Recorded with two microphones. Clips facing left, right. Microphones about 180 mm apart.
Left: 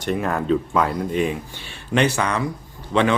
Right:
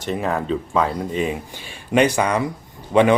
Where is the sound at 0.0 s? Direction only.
Centre (ahead or behind).